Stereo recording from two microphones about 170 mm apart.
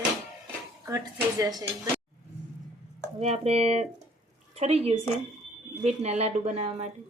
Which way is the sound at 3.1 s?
40° right (ahead or behind).